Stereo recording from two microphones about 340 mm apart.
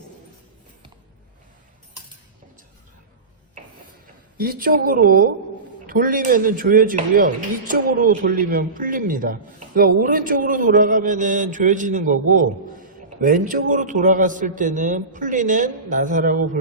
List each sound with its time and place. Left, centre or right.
4.0 s speech: right